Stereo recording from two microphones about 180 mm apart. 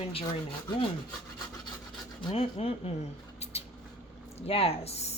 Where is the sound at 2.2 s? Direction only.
30° left (ahead or behind).